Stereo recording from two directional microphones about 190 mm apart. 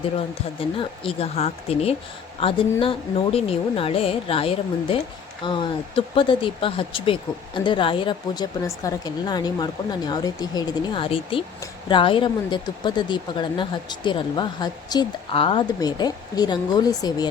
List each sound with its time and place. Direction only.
0.8 s speech: 30° left (ahead or behind)